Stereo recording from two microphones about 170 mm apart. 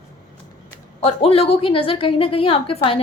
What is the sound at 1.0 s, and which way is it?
A woman's voice, 35° left (ahead or behind).